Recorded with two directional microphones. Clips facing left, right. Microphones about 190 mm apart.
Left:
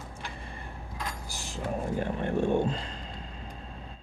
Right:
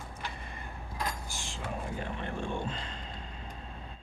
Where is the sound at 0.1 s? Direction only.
30° left (ahead or behind).